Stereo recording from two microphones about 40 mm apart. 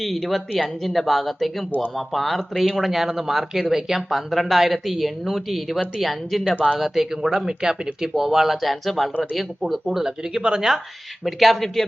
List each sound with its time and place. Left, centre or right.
0.0 s speech: centre
9.9 s speech: centre
11.3 s speech: centre